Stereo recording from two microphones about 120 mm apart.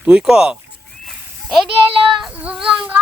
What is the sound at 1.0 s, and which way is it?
Sheep, centre (ahead or behind).